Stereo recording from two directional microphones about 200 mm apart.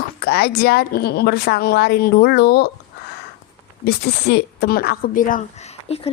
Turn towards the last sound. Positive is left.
turn(degrees=30)  # may be behind; listen again after turning